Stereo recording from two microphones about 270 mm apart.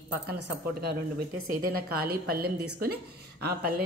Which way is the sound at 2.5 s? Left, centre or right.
Right.